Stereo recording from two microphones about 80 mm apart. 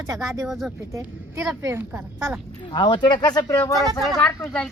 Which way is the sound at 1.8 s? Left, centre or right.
Right.